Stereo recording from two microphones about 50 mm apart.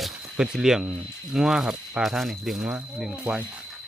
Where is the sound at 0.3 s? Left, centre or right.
Centre.